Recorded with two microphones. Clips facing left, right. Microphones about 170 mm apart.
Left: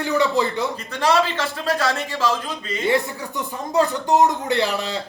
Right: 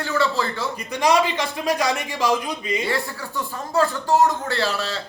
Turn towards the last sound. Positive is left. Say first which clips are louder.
# left 3 dB
turn(degrees=20)  # may be behind; listen again after turning